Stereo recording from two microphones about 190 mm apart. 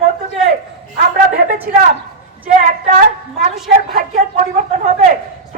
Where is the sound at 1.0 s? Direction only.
50° right (ahead or behind).